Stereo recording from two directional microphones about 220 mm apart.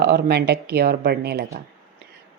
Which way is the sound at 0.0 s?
45° right (ahead or behind).